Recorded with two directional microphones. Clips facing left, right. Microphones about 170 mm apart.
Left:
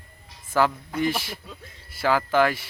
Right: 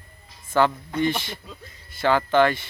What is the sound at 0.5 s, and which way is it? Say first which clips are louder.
A man's voice: right 2 dB; 5° left (ahead or behind).